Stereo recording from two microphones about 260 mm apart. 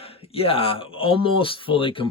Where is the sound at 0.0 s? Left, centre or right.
Left.